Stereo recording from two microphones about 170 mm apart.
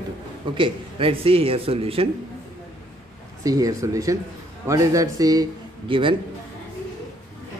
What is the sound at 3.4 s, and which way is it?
A man's voice, 20° right (ahead or behind).